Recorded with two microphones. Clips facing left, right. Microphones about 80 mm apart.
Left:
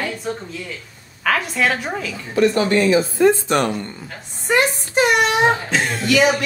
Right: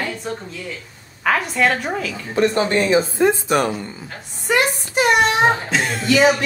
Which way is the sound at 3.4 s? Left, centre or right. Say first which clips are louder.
Even; centre.